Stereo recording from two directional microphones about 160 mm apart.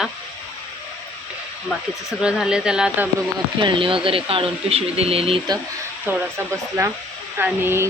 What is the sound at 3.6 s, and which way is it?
Speech, 35° right (ahead or behind).